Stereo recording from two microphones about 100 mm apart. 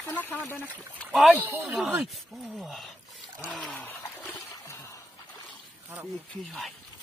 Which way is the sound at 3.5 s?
10° left (ahead or behind).